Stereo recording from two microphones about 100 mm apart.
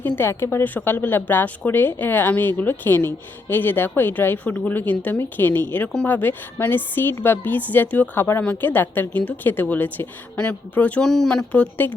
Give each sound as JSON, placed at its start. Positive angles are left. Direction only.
{"t": 0.2, "sound": "a woman's voice", "side_deg": 25}
{"t": 11.1, "sound": "a woman's voice", "side_deg": 5}